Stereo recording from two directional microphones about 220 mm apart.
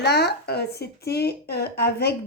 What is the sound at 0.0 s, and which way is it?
Speech, 50° left (ahead or behind).